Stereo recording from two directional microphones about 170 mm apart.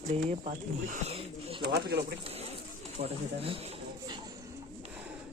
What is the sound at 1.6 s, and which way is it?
Speech, 75° right (ahead or behind).